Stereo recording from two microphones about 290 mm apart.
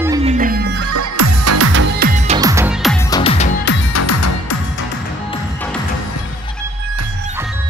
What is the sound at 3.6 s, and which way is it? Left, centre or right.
Music, left.